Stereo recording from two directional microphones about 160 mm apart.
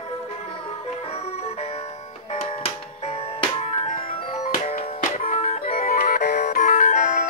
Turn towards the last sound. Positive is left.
turn(degrees=55)  # may be behind; listen again after turning